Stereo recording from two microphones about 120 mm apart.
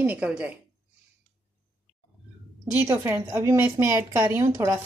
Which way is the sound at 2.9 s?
20° right (ahead or behind).